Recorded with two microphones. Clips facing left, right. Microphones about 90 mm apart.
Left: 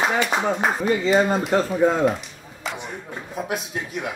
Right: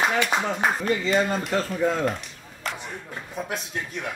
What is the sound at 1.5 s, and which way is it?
Speech, 35° left (ahead or behind).